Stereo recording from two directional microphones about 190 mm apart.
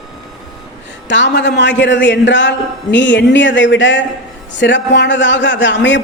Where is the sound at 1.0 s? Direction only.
70° left (ahead or behind).